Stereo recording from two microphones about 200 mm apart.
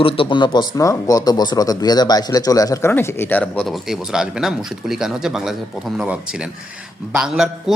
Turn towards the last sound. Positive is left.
turn(degrees=-5)  # may be behind; listen again after turning